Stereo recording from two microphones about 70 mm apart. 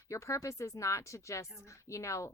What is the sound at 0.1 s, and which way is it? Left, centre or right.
Speech, left.